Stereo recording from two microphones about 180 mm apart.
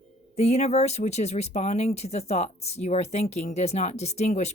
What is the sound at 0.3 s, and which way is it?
Speech, 35° left (ahead or behind).